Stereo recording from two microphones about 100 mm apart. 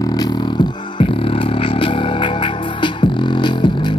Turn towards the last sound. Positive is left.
turn(degrees=50)  # may be behind; listen again after turning